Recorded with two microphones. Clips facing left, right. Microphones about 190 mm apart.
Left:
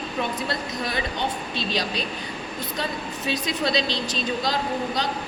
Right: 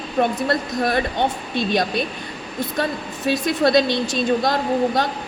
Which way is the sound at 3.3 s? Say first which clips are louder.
Right 8 dB; 55° right (ahead or behind).